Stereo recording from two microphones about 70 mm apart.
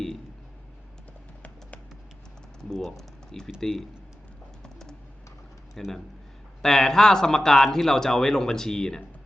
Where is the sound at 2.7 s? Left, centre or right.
Centre.